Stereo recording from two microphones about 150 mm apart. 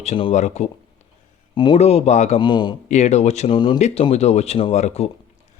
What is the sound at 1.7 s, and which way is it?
Speech, 45° left (ahead or behind).